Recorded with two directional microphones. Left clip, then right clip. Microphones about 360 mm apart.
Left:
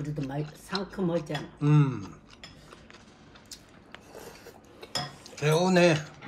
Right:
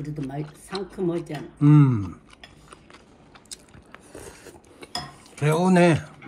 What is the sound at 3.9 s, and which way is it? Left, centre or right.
Filing, right.